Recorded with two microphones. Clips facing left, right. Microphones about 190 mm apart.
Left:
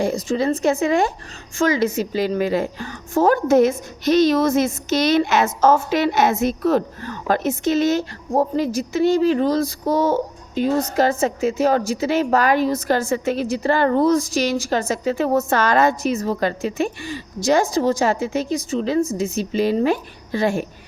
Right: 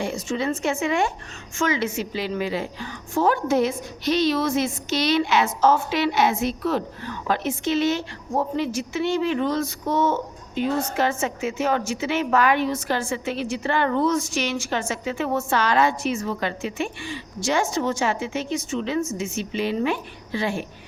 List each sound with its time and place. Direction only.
0.0 s a woman's voice: 40° left (ahead or behind)